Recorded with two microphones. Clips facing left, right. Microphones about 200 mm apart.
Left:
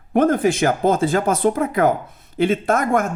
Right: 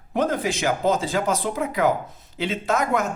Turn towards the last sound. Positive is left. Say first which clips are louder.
# left 4 dB
turn(degrees=50)  # may be behind; listen again after turning